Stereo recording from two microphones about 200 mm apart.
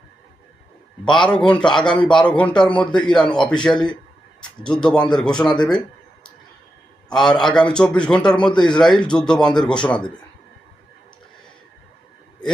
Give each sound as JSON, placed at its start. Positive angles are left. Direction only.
{"t": 1.1, "sound": "a man's voice", "side_deg": 5}
{"t": 7.1, "sound": "a man's voice", "side_deg": 5}